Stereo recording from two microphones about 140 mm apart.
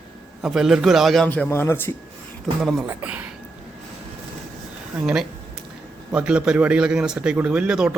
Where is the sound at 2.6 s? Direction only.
Centre (ahead or behind).